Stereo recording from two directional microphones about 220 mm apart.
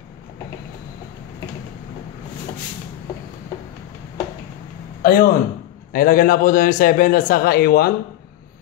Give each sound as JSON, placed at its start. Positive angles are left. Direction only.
{"t": 5.0, "sound": "a man's voice", "side_deg": 40}